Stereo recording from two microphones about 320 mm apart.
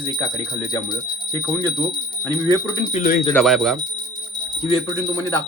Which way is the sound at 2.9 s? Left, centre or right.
Left.